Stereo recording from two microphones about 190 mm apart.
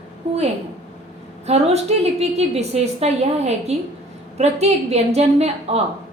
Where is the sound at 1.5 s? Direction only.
35° right (ahead or behind).